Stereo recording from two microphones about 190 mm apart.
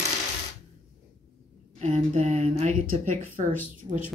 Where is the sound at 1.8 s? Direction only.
35° right (ahead or behind).